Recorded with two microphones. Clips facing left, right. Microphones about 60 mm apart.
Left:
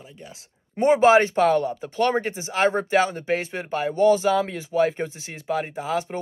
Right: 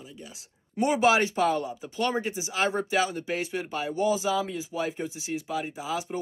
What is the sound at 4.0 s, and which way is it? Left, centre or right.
Speech, left.